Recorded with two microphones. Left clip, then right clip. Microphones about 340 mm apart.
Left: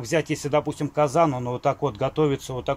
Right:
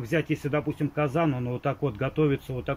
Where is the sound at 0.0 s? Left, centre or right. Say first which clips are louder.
Left 3 dB; centre.